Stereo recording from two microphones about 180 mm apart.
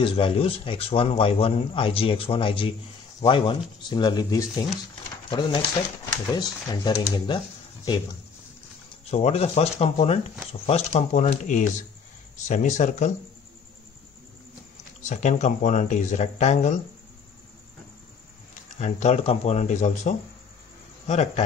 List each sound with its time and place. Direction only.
0.0 s a man's voice: 30° left (ahead or behind)
9.1 s a man's voice: 35° left (ahead or behind)
15.0 s speech: 45° left (ahead or behind)
18.8 s a man's voice: 40° left (ahead or behind)